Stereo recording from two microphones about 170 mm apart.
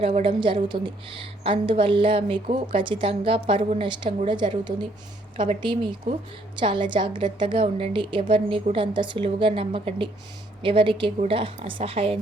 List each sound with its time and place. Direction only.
0.0 s a woman's voice: 35° right (ahead or behind)